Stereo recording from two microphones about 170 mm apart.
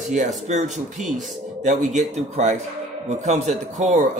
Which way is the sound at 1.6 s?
45° right (ahead or behind).